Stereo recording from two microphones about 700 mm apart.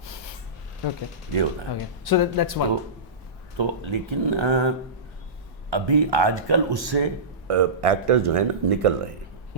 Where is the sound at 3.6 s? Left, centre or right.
Right.